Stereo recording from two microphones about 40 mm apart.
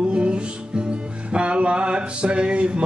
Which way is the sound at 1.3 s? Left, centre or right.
Right.